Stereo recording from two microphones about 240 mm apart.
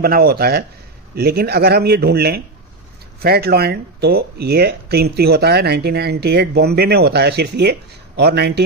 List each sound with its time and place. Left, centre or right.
0.0 s speech: right